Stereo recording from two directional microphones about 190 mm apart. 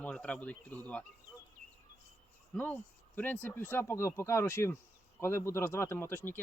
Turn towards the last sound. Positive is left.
turn(degrees=10)  # may be behind; listen again after turning